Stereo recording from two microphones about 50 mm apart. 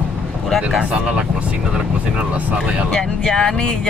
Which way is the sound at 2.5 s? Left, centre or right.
Centre.